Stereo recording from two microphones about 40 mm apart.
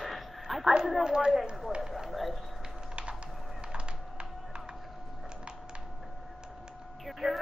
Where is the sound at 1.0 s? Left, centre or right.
Centre.